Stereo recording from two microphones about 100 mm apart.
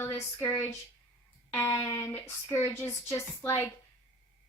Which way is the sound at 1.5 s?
25° left (ahead or behind).